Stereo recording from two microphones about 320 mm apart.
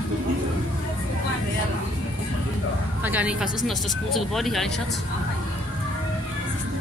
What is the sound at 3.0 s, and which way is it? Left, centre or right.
Speech, centre.